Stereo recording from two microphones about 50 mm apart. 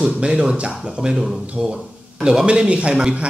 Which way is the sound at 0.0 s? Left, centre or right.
Centre.